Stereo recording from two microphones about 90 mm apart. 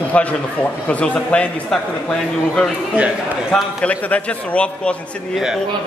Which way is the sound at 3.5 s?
5° left (ahead or behind).